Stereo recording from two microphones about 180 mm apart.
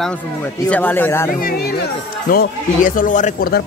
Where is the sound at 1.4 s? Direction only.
55° left (ahead or behind).